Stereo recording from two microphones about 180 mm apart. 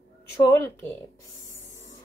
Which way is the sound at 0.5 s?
15° left (ahead or behind).